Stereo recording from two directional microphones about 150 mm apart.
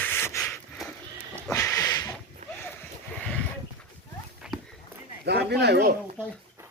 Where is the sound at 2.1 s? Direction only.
10° left (ahead or behind).